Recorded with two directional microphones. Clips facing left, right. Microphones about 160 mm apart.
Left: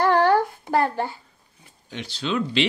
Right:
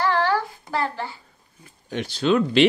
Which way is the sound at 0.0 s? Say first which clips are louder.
Left 4 dB; 50° left (ahead or behind).